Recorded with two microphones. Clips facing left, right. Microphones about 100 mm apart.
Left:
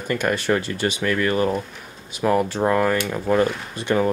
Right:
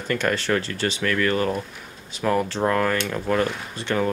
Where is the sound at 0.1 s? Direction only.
15° left (ahead or behind).